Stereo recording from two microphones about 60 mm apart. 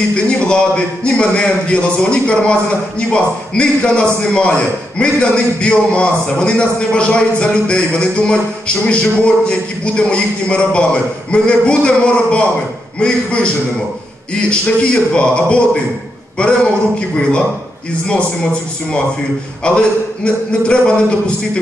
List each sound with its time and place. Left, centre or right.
0.1 s a man's voice: centre
18.0 s a man's voice: centre